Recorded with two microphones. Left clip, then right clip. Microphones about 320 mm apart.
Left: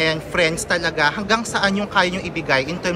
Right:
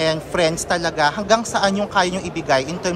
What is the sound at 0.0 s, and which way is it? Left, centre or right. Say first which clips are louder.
A woman's voice: even; centre.